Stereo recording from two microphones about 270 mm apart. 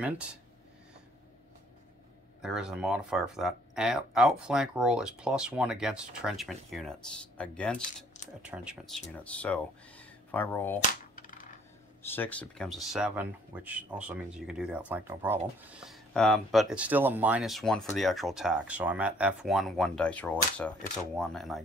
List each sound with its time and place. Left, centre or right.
2.4 s speech: centre
10.8 s a sound: left
12.0 s speech: centre